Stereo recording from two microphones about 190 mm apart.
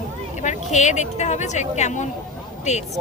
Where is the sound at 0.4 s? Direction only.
40° left (ahead or behind).